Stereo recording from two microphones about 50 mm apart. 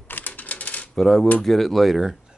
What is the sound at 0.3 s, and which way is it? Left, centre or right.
Typewriter, left.